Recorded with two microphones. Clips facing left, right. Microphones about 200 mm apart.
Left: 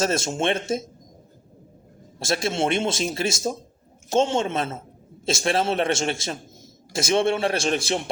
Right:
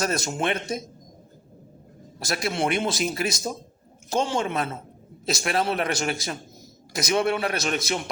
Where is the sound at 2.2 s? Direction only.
25° left (ahead or behind).